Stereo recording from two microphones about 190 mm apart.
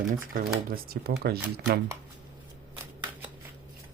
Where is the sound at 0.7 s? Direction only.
55° right (ahead or behind).